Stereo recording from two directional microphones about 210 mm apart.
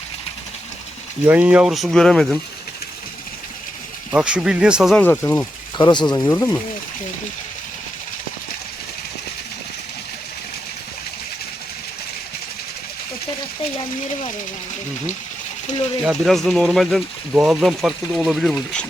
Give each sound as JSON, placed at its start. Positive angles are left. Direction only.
{"t": 1.2, "sound": "speech", "side_deg": -10}
{"t": 4.1, "sound": "speech", "side_deg": -5}
{"t": 5.7, "sound": "speech", "side_deg": 20}
{"t": 16.0, "sound": "speech", "side_deg": 0}